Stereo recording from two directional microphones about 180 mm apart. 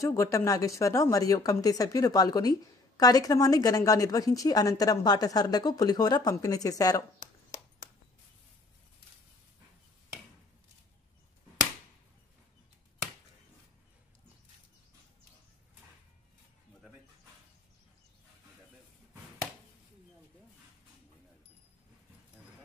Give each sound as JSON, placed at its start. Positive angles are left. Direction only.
{"t": 0.0, "sound": "a woman's voice", "side_deg": 15}